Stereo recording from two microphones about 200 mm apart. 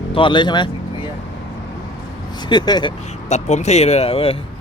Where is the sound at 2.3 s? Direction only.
20° left (ahead or behind).